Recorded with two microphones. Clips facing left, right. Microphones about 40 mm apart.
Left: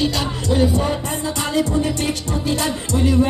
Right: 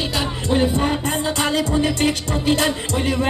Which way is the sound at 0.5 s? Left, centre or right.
Right.